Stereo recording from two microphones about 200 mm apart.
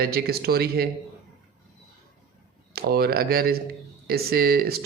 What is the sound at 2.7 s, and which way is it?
Speech, 50° right (ahead or behind).